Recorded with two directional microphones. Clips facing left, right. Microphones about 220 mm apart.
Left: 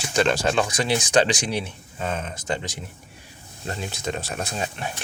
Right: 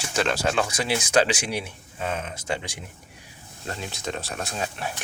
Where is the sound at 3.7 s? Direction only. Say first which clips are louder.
Left 3 dB; centre (ahead or behind).